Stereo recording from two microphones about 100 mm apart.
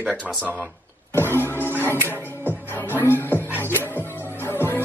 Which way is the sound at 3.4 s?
20° right (ahead or behind).